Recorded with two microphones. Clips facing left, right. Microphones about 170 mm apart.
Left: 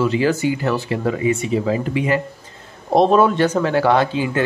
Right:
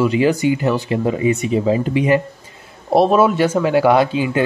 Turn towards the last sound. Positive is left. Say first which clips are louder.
# right 2 dB
turn(degrees=-15)  # may be behind; listen again after turning